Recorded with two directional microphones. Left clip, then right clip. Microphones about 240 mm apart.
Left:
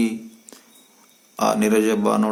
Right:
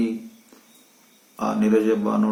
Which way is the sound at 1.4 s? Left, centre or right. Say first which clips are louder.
Left 3 dB; left.